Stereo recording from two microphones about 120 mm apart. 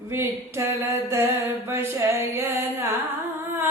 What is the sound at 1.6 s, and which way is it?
Music, 20° right (ahead or behind).